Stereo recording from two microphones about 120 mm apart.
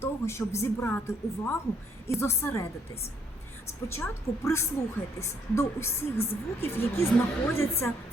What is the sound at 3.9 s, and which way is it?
A woman's voice, 20° left (ahead or behind).